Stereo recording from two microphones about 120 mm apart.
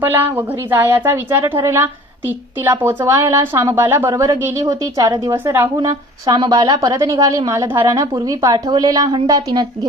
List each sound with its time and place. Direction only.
0.0 s a woman's voice: 15° right (ahead or behind); by 9.6 s 35° right (ahead or behind)